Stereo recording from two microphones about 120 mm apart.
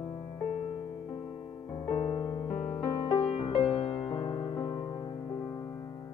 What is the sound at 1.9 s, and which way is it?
Music, 60° left (ahead or behind).